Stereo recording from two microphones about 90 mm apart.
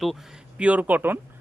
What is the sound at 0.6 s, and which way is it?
Speech, 15° right (ahead or behind).